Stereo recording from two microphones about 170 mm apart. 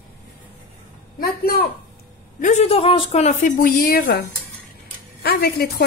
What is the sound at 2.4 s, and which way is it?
Speech, 40° left (ahead or behind).